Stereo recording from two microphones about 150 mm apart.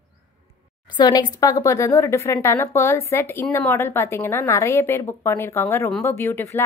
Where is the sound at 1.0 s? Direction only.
25° left (ahead or behind).